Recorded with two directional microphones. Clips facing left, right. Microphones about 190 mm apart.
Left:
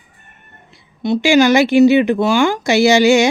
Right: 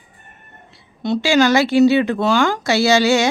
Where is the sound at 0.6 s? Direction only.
15° left (ahead or behind).